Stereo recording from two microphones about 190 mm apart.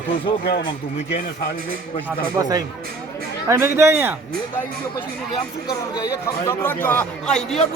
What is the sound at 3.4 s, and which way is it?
Speech, 15° right (ahead or behind).